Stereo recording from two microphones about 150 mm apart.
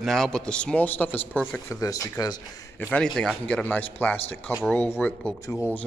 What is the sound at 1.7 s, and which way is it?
Speech, 25° left (ahead or behind).